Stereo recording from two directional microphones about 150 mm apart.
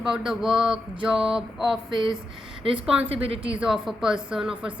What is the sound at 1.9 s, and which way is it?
Speech, 30° right (ahead or behind).